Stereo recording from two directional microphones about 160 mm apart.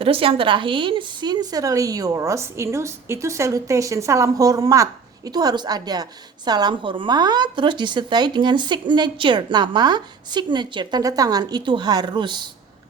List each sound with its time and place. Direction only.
0.0 s a woman's voice: 35° right (ahead or behind)